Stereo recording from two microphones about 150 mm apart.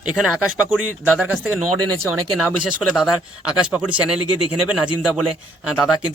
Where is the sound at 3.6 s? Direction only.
10° right (ahead or behind).